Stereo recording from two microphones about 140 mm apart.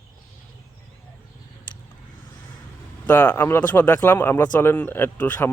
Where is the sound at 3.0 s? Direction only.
10° left (ahead or behind).